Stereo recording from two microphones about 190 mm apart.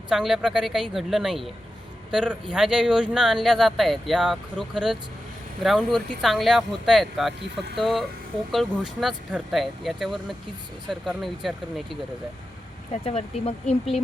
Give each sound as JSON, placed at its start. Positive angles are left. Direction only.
{"t": 0.1, "sound": "speech", "side_deg": 0}
{"t": 12.9, "sound": "speech", "side_deg": 35}